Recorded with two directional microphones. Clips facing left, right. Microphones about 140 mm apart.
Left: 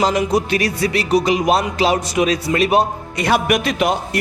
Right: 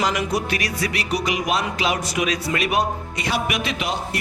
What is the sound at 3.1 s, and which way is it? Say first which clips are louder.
A man's voice: left 9 dB; 55° left (ahead or behind).